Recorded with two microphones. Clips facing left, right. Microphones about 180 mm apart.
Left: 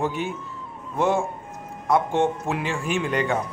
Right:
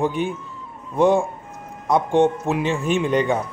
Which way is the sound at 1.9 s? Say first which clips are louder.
Right 4 dB; 15° right (ahead or behind).